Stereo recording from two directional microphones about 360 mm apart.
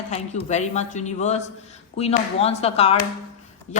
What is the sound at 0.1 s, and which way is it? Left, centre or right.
A woman's voice, centre.